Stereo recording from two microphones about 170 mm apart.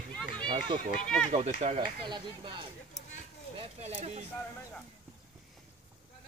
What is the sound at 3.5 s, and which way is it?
Speech, 40° right (ahead or behind).